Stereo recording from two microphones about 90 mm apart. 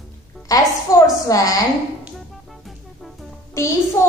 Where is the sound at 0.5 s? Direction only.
40° left (ahead or behind).